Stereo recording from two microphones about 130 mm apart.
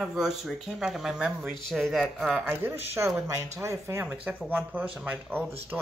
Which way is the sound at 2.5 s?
15° right (ahead or behind).